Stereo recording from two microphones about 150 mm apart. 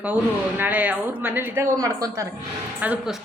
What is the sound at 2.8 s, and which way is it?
Speech, 10° right (ahead or behind).